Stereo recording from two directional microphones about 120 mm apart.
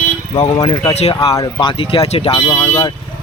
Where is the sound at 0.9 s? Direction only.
60° left (ahead or behind).